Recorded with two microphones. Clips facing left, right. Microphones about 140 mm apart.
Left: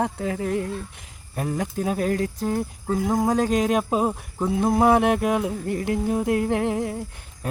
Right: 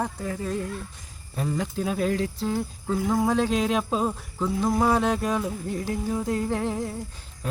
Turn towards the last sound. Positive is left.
turn(degrees=50)  # may be behind; listen again after turning